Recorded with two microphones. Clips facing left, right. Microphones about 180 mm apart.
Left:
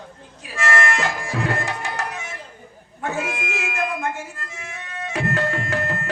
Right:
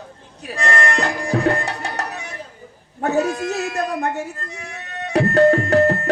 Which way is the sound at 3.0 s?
40° right (ahead or behind).